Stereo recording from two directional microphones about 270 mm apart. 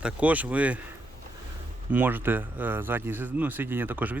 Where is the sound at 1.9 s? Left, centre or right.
Centre.